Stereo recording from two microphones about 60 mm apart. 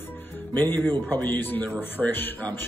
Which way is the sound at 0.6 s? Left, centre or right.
Left.